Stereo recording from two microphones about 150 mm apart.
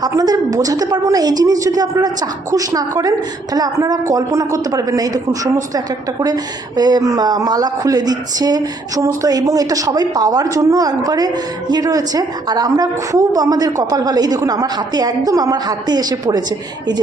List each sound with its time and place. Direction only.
0.0 s a woman's voice: 25° right (ahead or behind)